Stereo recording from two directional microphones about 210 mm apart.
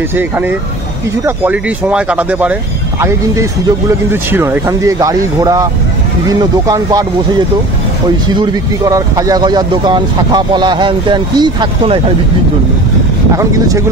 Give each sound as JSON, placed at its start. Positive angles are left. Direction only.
{"t": 0.1, "sound": "speech", "side_deg": -10}
{"t": 13.4, "sound": "speech", "side_deg": -15}